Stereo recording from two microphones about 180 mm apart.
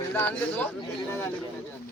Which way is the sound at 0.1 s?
10° left (ahead or behind).